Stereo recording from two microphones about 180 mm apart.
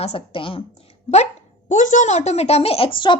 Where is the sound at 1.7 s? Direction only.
45° left (ahead or behind); by 3.1 s 25° left (ahead or behind).